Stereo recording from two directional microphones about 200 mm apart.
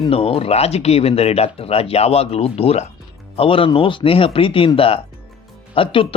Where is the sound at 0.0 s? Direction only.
30° left (ahead or behind).